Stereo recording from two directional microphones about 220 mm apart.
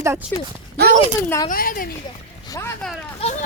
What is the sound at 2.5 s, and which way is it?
Boat, 10° left (ahead or behind).